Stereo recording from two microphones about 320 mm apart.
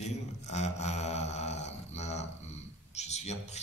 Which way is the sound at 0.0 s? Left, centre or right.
Left.